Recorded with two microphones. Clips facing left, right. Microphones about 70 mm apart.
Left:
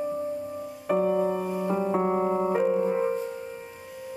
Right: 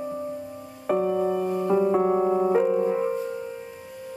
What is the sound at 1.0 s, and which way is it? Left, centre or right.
Music, centre.